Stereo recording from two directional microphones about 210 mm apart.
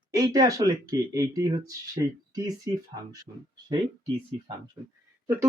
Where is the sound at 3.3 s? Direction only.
35° right (ahead or behind).